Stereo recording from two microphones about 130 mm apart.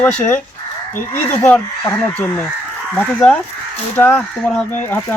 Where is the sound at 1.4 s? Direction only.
10° left (ahead or behind).